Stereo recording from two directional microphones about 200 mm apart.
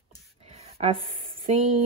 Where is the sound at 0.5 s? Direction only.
30° right (ahead or behind).